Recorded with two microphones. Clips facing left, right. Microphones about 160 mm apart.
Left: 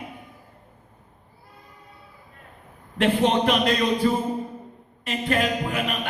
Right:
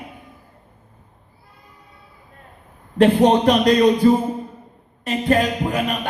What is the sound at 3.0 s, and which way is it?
Speech, 40° right (ahead or behind).